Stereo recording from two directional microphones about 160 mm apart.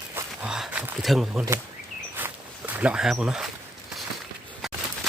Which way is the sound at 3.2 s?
5° right (ahead or behind).